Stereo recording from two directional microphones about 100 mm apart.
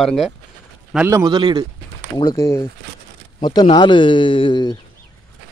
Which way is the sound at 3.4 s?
45° left (ahead or behind).